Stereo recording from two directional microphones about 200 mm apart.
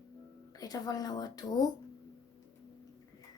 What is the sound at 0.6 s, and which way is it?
Speech, 20° left (ahead or behind).